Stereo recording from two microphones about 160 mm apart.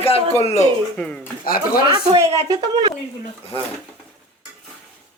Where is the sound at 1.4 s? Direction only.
65° left (ahead or behind).